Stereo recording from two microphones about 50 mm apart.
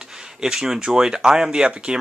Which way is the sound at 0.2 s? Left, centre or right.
Centre.